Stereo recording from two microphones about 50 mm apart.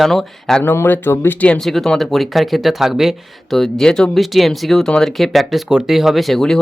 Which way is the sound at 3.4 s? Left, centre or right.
Centre.